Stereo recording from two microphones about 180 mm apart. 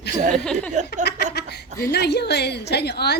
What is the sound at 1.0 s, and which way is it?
A woman's voice, 70° left (ahead or behind).